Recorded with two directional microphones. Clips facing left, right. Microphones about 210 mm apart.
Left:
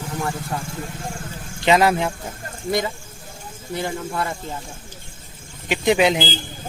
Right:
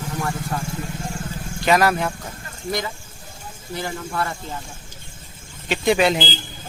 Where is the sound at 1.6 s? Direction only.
20° left (ahead or behind).